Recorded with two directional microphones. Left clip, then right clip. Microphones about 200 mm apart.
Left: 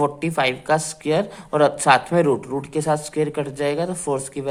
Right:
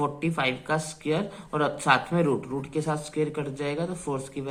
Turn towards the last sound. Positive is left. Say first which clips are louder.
# left 7 dB
turn(degrees=45)  # may be behind; listen again after turning